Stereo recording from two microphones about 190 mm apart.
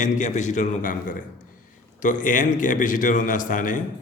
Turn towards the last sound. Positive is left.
turn(degrees=45)  # may be behind; listen again after turning